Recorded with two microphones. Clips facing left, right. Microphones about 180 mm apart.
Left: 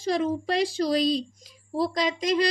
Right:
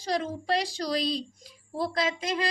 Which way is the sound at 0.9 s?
45° left (ahead or behind).